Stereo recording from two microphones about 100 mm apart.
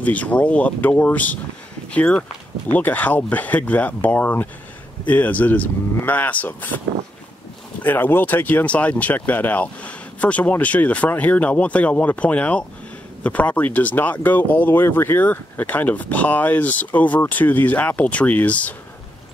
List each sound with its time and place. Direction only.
0.0 s speech: 15° left (ahead or behind)
7.8 s speech: 20° left (ahead or behind)